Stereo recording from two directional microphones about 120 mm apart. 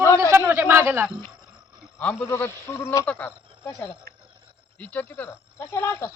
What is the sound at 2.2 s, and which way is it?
Speech, 20° left (ahead or behind).